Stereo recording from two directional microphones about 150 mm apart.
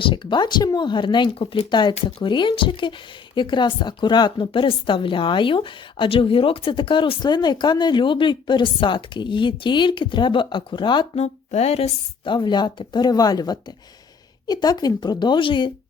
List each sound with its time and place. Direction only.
0.0 s a woman's voice: 30° left (ahead or behind)
11.2 s speech: 45° left (ahead or behind)